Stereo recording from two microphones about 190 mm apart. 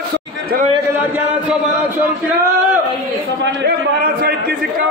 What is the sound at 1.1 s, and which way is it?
Chant, 5° right (ahead or behind).